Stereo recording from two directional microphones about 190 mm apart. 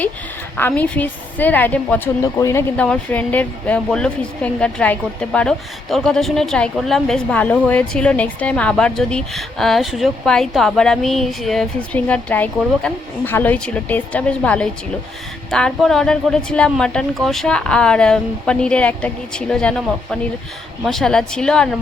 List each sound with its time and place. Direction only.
0.5 s a woman's voice: 10° left (ahead or behind)